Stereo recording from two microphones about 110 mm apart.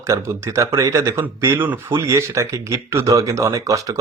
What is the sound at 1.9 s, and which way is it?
Speech, 25° right (ahead or behind).